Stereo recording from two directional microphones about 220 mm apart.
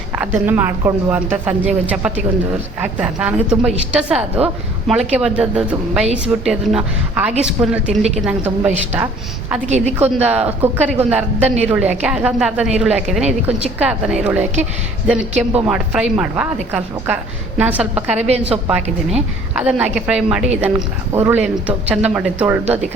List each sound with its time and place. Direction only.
0.2 s a woman's voice: 10° right (ahead or behind)
9.6 s a woman's voice: 30° right (ahead or behind)
10.2 s a woman's voice: 5° right (ahead or behind)
17.6 s a woman's voice: 5° right (ahead or behind)
18.2 s a woman's voice: 30° right (ahead or behind)
19.5 s a woman's voice: 5° right (ahead or behind)